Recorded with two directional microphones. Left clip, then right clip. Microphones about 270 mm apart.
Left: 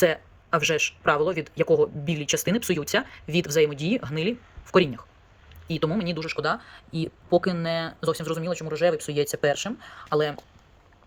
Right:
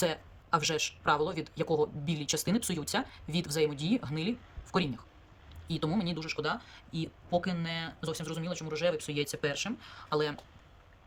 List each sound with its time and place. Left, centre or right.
0.5 s speech: centre